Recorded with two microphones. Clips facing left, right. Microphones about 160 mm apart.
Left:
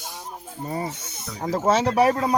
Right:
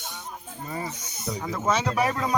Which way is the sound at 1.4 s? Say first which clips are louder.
Left 6 dB; 40° left (ahead or behind).